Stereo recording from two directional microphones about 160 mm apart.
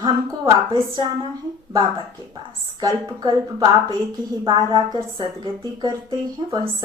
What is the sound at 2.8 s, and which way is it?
A woman's voice, 25° right (ahead or behind).